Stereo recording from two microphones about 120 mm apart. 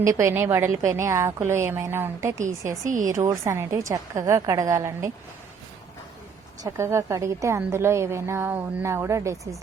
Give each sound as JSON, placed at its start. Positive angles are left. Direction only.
{"t": 0.0, "sound": "a woman's voice", "side_deg": -25}
{"t": 2.8, "sound": "a woman's voice", "side_deg": -90}
{"t": 3.1, "sound": "a woman's voice", "side_deg": -25}
{"t": 6.6, "sound": "a woman's voice", "side_deg": -25}